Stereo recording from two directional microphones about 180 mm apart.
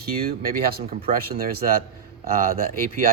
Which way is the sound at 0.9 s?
30° right (ahead or behind).